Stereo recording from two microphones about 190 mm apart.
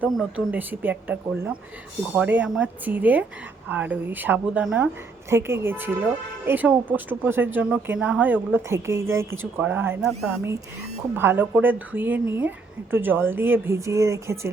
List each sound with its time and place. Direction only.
0.0 s speech: 5° right (ahead or behind)
11.1 s speech: 10° right (ahead or behind)